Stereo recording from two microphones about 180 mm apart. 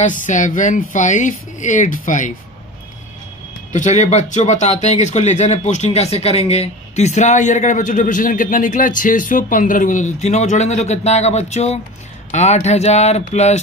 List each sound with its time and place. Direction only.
0.0 s speech: 45° left (ahead or behind)
3.7 s speech: 40° left (ahead or behind)